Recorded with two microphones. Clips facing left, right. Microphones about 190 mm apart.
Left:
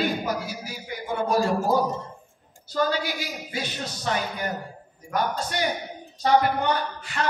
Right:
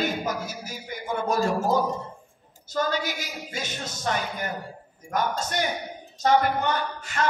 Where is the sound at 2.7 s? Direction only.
45° right (ahead or behind).